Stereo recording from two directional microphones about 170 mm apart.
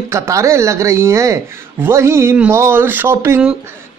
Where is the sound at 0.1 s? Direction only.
15° right (ahead or behind).